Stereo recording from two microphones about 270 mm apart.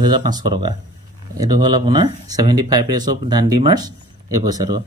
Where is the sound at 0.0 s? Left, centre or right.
Centre.